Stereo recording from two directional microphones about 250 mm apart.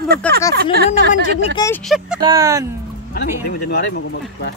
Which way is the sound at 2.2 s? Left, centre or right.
Centre.